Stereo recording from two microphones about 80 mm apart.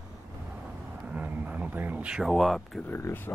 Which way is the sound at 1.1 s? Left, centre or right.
Centre.